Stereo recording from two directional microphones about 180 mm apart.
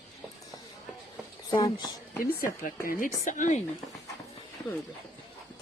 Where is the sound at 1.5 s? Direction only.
20° left (ahead or behind).